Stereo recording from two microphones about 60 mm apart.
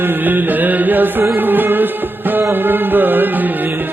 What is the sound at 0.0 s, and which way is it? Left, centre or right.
Music, right.